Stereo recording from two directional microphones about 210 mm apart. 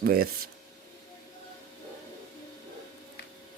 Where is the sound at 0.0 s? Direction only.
45° right (ahead or behind).